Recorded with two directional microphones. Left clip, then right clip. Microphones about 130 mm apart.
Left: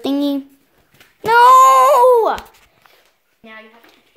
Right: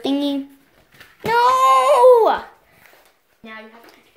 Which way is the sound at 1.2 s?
60° left (ahead or behind).